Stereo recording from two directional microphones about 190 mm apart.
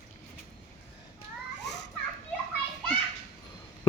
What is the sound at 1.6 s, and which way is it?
Children playing, 65° left (ahead or behind).